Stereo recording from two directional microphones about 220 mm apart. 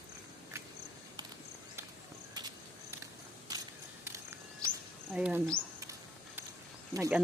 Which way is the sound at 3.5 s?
15° right (ahead or behind).